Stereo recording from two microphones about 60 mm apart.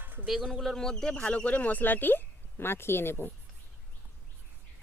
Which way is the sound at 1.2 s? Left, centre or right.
Left.